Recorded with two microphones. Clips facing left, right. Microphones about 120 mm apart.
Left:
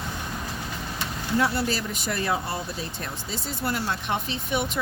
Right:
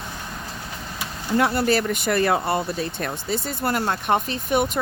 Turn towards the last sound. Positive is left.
turn(degrees=-50)  # may be behind; listen again after turning